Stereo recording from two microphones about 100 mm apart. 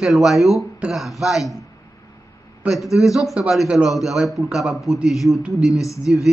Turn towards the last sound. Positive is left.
turn(degrees=30)  # may be behind; listen again after turning